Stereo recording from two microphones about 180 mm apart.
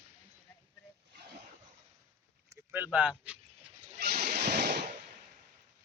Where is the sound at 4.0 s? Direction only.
60° right (ahead or behind).